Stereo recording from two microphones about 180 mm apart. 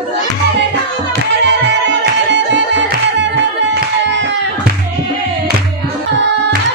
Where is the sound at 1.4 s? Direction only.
80° right.